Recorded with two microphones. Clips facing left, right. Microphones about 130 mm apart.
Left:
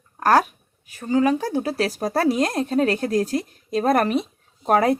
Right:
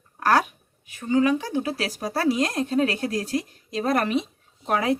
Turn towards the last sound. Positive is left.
turn(degrees=45)  # may be behind; listen again after turning